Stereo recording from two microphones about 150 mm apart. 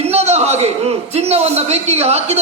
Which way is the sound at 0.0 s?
45° right (ahead or behind).